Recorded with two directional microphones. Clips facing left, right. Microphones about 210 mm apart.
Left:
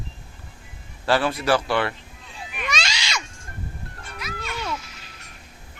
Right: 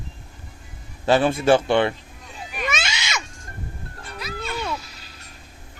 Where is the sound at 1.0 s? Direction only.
20° right (ahead or behind).